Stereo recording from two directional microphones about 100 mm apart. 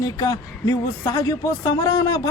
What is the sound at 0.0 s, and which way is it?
Speech, 40° left (ahead or behind).